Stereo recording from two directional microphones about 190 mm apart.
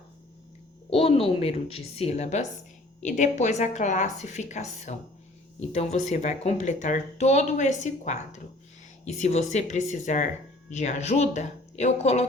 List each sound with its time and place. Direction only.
0.9 s speech: 30° left (ahead or behind)